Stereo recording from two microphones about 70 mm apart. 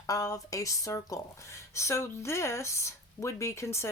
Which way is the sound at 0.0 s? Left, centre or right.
Left.